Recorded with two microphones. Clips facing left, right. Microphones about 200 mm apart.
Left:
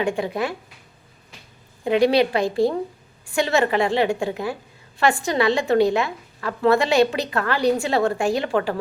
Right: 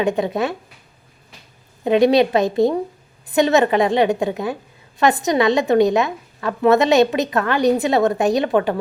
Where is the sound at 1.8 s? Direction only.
20° right (ahead or behind).